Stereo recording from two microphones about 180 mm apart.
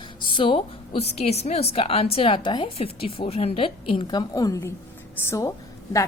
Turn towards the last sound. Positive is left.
turn(degrees=15)  # may be behind; listen again after turning